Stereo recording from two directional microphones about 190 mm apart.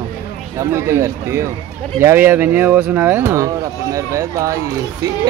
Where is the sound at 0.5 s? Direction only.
15° right (ahead or behind).